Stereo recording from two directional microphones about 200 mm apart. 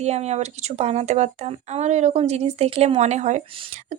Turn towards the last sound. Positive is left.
turn(degrees=-35)  # may be behind; listen again after turning